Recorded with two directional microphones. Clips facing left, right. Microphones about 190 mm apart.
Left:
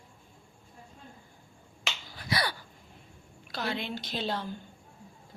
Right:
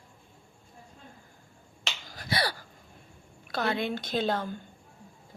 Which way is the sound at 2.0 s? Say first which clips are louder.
Right 2 dB; 40° right (ahead or behind).